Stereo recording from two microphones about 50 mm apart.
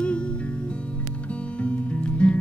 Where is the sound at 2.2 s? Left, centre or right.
Left.